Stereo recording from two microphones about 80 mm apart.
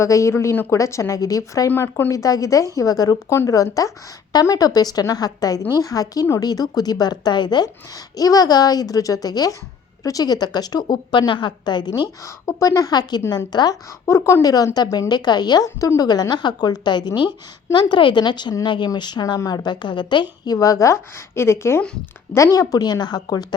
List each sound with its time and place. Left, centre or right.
0.0 s a woman's voice: left
1.7 s speech: left
2.0 s a woman's voice: left
3.3 s a woman's voice: left
8.1 s a woman's voice: left
12.2 s a woman's voice: left
14.1 s speech: left
14.4 s a woman's voice: left
15.1 s a woman's voice: left
22.5 s a woman's voice: left